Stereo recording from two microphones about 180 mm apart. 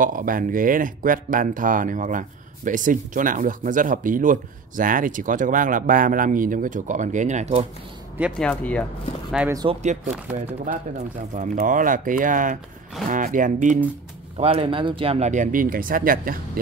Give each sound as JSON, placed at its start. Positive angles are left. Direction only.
{"t": 0.0, "sound": "speech", "side_deg": -50}
{"t": 8.4, "sound": "speech", "side_deg": 5}
{"t": 9.4, "sound": "speech", "side_deg": -5}
{"t": 10.7, "sound": "speech", "side_deg": -45}
{"t": 14.3, "sound": "speech", "side_deg": -30}